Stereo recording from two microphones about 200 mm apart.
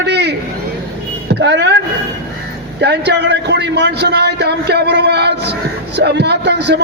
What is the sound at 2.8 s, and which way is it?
A man's voice, 55° right (ahead or behind).